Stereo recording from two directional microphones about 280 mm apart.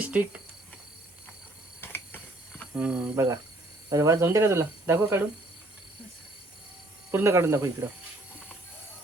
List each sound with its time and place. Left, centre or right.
0.0 s speech: centre
1.8 s a sound: centre
2.7 s speech: centre
7.1 s speech: centre